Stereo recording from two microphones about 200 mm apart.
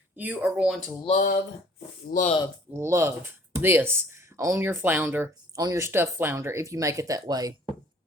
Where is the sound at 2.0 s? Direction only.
40° left (ahead or behind).